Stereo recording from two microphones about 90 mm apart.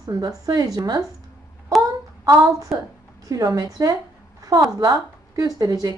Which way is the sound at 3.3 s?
40° right (ahead or behind).